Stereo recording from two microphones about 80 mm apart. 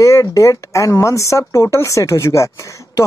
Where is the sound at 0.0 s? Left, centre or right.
Left.